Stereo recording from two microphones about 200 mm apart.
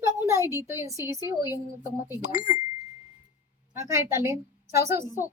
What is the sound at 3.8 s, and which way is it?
Speech, 15° right (ahead or behind).